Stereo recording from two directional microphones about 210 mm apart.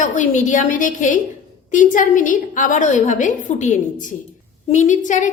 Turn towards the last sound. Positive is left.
turn(degrees=35)  # may be behind; listen again after turning